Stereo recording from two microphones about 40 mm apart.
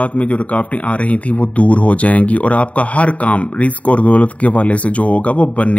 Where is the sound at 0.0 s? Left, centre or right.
Left.